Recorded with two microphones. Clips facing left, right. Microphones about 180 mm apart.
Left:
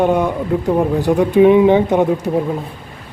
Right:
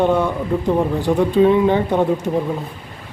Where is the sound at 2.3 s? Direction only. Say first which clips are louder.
Left 2 dB; 5° left (ahead or behind).